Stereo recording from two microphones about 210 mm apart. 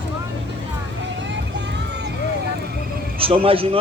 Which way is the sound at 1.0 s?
60° right (ahead or behind).